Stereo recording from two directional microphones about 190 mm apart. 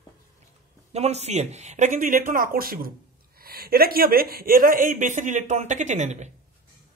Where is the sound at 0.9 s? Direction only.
35° right (ahead or behind).